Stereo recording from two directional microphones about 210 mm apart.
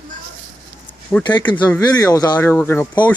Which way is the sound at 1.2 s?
20° left (ahead or behind).